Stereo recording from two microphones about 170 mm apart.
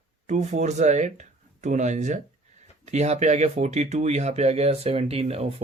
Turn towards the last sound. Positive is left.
turn(degrees=-35)  # may be behind; listen again after turning